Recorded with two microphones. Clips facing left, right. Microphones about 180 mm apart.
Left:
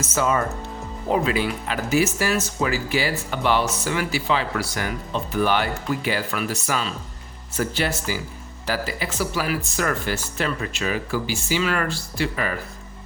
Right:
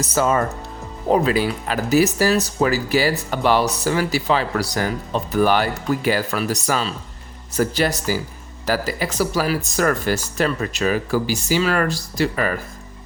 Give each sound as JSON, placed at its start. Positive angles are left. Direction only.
{"t": 0.0, "sound": "speech", "side_deg": -35}